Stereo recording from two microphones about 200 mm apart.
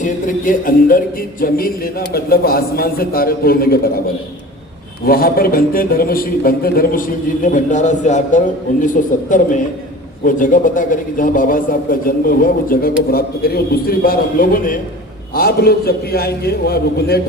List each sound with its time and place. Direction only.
0.0 s speech: 40° left (ahead or behind)
5.0 s speech: 50° left (ahead or behind)